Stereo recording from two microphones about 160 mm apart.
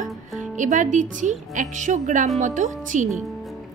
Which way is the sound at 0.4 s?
50° right (ahead or behind).